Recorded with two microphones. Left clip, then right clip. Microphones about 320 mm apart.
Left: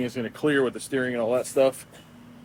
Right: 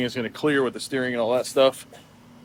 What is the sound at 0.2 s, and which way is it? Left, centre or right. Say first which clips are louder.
Speech: even; centre.